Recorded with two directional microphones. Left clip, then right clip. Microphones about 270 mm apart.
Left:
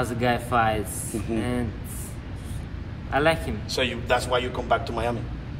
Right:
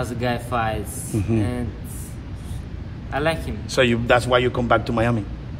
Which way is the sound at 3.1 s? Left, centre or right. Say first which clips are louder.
Left 1 dB; centre.